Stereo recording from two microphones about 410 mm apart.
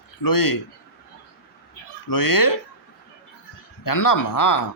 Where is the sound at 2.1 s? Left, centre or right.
Left.